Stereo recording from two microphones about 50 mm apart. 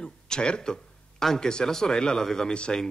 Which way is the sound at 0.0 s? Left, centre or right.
Centre.